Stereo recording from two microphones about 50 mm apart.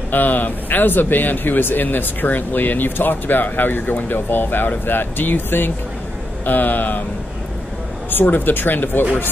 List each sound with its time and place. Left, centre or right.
0.1 s speech: left
8.1 s speech: left